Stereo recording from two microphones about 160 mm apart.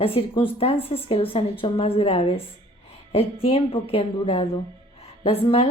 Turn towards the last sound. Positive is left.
turn(degrees=40)  # may be behind; listen again after turning